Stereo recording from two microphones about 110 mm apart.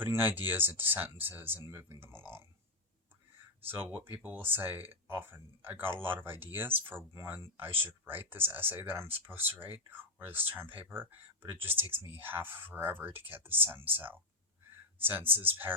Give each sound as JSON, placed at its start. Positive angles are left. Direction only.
{"t": 0.0, "sound": "speech", "side_deg": -20}
{"t": 3.7, "sound": "speech", "side_deg": -20}